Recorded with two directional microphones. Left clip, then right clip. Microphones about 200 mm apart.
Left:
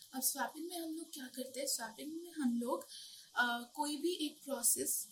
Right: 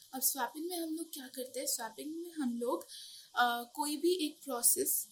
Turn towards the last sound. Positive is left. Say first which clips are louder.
# right 4 dB
turn(degrees=-55)  # may be behind; listen again after turning